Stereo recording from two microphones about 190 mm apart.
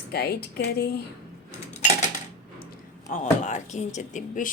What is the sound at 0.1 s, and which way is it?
Speech, 55° left (ahead or behind).